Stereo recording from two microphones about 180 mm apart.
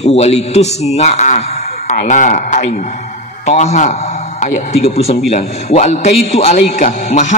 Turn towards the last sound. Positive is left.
turn(degrees=40)  # may be behind; listen again after turning